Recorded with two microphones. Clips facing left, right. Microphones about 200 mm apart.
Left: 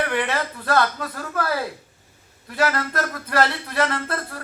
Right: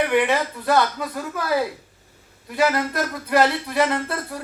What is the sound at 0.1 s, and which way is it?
A man's voice, 15° right (ahead or behind).